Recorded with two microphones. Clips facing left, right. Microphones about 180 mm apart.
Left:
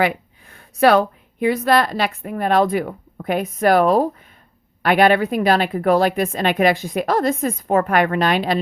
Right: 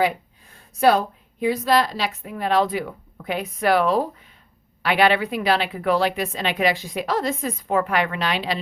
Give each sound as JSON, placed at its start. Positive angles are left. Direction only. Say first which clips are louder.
{"t": 0.0, "sound": "a woman's voice", "louder": "left 2 dB", "side_deg": 70}